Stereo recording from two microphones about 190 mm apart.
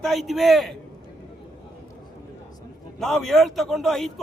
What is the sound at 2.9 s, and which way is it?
A man's voice, centre (ahead or behind).